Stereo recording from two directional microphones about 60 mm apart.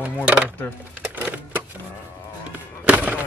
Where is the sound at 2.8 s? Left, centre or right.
Right.